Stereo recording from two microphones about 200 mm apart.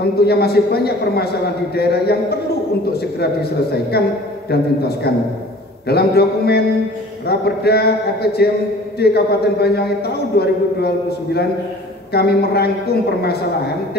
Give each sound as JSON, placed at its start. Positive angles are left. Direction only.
{"t": 0.0, "sound": "a man's voice", "side_deg": 55}